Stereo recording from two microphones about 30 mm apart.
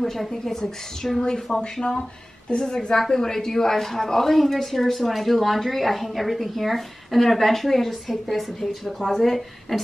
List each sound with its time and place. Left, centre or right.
0.0 s a woman's voice: centre
0.3 s a woman's voice: centre
1.2 s a woman's voice: left
2.6 s a woman's voice: left
2.9 s a woman's voice: centre